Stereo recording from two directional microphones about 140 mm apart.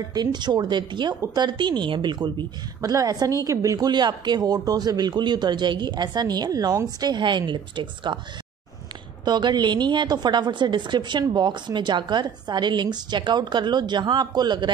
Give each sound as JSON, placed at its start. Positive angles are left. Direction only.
{"t": 0.1, "sound": "a woman's voice", "side_deg": -30}
{"t": 9.2, "sound": "a woman's voice", "side_deg": -30}